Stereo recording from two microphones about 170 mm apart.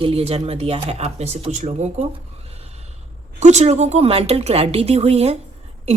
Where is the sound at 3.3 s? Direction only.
40° right (ahead or behind).